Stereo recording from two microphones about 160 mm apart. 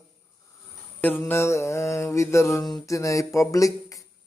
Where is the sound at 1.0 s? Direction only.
10° left (ahead or behind).